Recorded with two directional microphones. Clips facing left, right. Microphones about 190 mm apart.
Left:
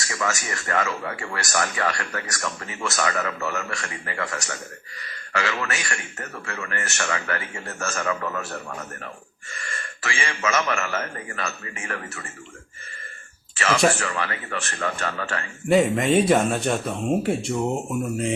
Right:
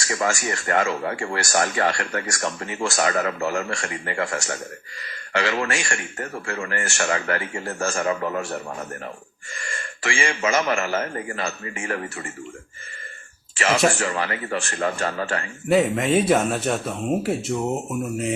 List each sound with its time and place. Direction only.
0.1 s speech: 30° right (ahead or behind)
14.0 s a man's voice: 30° right (ahead or behind)
15.7 s speech: centre (ahead or behind)